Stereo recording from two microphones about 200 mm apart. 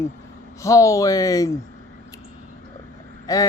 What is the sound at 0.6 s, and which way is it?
Speech, 15° left (ahead or behind).